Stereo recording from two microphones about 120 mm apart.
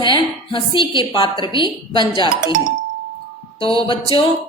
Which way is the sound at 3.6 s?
45° left (ahead or behind).